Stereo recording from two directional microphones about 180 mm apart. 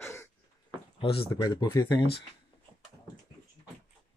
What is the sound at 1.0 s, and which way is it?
Speech, 30° left (ahead or behind).